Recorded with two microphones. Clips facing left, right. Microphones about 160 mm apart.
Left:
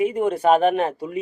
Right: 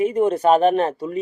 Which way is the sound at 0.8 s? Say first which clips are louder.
Right 2 dB; 10° left (ahead or behind).